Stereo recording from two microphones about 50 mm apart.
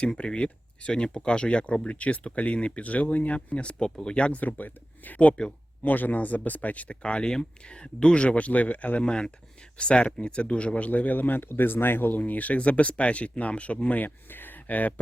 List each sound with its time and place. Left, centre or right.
0.0 s speech: centre
4.4 s speech: left
12.2 s speech: left
14.0 s speech: left